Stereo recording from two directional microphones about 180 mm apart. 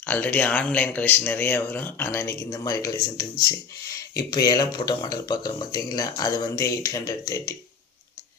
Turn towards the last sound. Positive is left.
turn(degrees=20)  # may be behind; listen again after turning